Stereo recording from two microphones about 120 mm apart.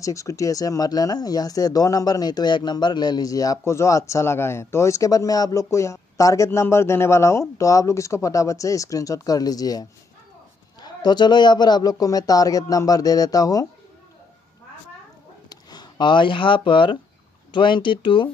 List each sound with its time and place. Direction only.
0.0 s speech: 25° left (ahead or behind)
15.5 s speech: 35° left (ahead or behind)